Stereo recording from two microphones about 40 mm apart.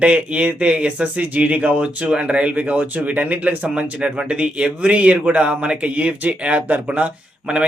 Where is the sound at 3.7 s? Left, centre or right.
Right.